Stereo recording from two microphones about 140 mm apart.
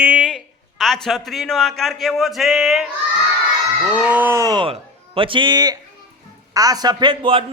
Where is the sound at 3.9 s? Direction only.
10° right (ahead or behind).